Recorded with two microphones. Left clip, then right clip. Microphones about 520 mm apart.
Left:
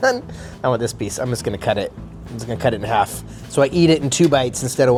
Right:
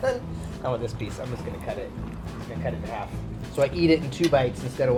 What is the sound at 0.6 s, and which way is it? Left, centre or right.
Speech, left.